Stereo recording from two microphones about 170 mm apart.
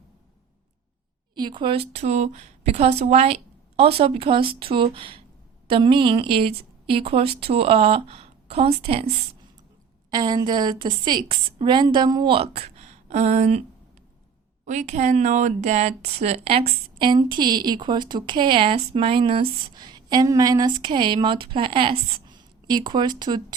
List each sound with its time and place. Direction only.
1.4 s a woman's voice: 25° right (ahead or behind)
10.1 s speech: 25° right (ahead or behind); by 13.6 s 40° right (ahead or behind)
14.6 s speech: 45° right (ahead or behind); by 23.6 s 25° right (ahead or behind)